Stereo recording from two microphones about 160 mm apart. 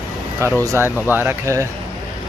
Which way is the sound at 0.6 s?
15° right (ahead or behind).